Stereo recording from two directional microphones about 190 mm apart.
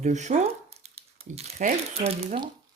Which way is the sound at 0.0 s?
40° right (ahead or behind).